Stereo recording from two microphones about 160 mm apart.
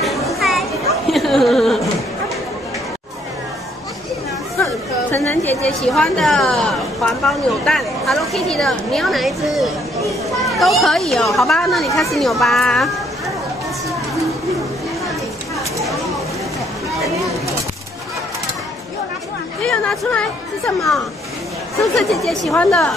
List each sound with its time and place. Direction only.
0.0 s children playing: centre (ahead or behind)
1.0 s a sound: centre (ahead or behind)
4.6 s chatter: 10° left (ahead or behind)
5.1 s a woman's voice: 15° left (ahead or behind)
5.8 s a woman's voice: centre (ahead or behind)
19.6 s a woman's voice: 5° left (ahead or behind)
21.9 s a woman's voice: centre (ahead or behind)